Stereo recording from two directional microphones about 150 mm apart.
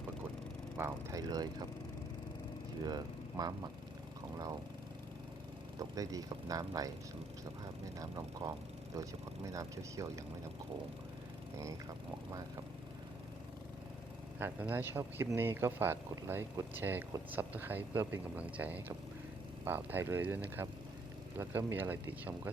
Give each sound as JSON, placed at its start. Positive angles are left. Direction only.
{"t": 0.8, "sound": "speech", "side_deg": -20}
{"t": 2.8, "sound": "speech", "side_deg": -25}
{"t": 5.9, "sound": "speech", "side_deg": -25}
{"t": 7.9, "sound": "speech", "side_deg": -25}
{"t": 14.3, "sound": "a man's voice", "side_deg": -15}